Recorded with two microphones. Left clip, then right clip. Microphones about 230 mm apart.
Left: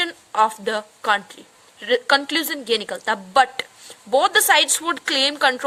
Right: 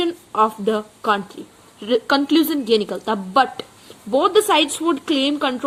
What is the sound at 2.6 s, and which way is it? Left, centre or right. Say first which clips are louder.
A woman's voice: right 3 dB; left.